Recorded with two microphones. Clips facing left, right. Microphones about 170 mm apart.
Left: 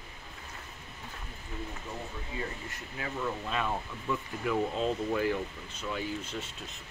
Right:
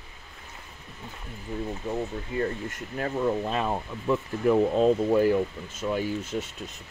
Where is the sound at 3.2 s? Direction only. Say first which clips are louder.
Right 7 dB; 35° right (ahead or behind).